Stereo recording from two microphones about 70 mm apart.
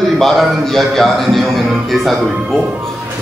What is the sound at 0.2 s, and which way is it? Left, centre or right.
A man's voice, centre.